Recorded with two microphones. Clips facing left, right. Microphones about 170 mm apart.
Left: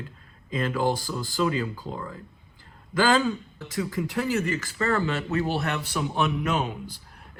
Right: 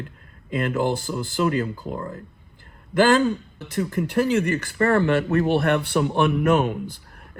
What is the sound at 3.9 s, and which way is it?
Speech, 65° right (ahead or behind).